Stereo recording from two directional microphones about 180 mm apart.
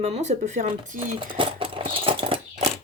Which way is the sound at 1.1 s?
30° right (ahead or behind).